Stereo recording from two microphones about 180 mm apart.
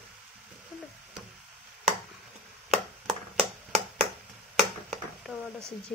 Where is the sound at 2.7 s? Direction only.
Centre (ahead or behind).